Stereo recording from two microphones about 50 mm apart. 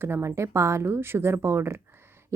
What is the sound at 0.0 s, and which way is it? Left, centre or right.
Speech, right.